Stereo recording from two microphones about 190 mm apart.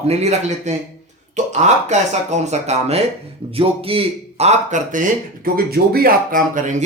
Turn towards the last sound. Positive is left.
turn(degrees=-45)  # may be behind; listen again after turning